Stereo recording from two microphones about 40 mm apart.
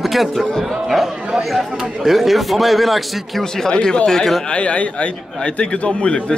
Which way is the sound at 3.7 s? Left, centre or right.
Left.